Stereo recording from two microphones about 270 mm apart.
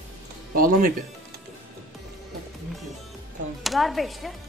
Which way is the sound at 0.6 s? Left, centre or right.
Right.